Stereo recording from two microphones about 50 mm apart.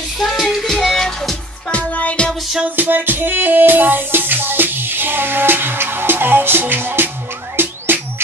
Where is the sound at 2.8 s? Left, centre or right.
Right.